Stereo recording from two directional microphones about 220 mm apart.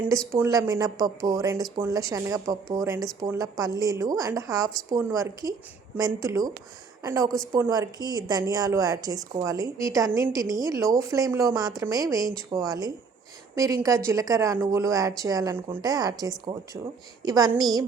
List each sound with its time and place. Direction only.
0.3 s a woman's voice: 15° right (ahead or behind)